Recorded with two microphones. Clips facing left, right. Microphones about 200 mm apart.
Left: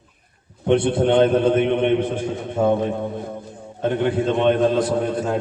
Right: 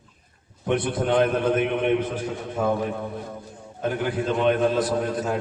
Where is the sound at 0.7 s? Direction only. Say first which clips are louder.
Left 6 dB; 30° left (ahead or behind).